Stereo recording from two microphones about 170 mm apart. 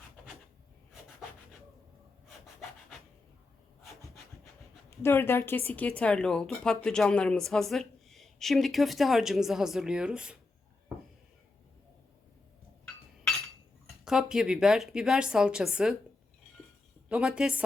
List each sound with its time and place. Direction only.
4.9 s a woman's voice: 15° left (ahead or behind); by 10.3 s 5° right (ahead or behind)
13.8 s a woman's voice: centre (ahead or behind)
17.1 s a woman's voice: 5° right (ahead or behind)